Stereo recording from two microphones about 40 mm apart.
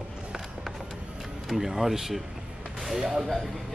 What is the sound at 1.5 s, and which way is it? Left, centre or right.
Speech, centre.